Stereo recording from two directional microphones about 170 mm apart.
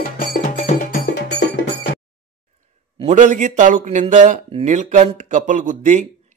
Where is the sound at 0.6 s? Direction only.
45° left (ahead or behind).